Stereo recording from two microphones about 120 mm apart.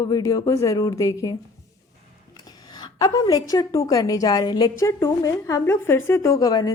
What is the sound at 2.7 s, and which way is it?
A woman's voice, 35° left (ahead or behind).